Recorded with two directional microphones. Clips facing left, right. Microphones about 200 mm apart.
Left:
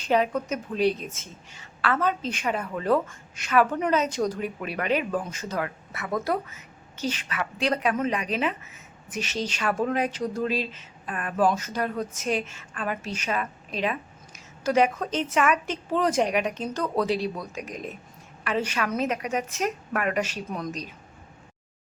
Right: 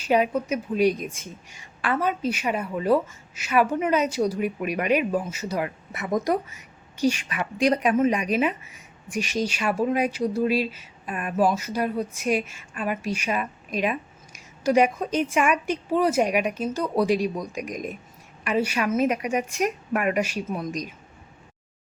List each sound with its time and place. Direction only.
0.0 s speech: 10° right (ahead or behind)